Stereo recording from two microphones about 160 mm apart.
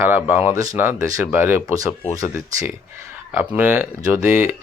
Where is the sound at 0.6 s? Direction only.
20° right (ahead or behind).